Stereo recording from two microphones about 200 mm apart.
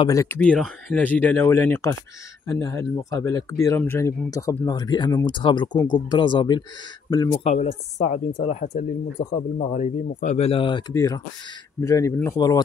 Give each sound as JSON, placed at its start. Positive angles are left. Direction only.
{"t": 0.0, "sound": "speech", "side_deg": 15}
{"t": 7.4, "sound": "speech", "side_deg": 30}